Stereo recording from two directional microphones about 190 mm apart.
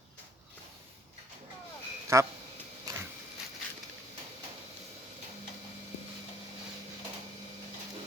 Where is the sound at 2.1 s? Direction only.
15° right (ahead or behind).